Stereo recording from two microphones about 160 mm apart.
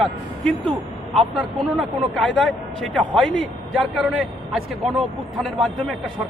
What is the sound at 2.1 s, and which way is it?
A man's voice, centre (ahead or behind).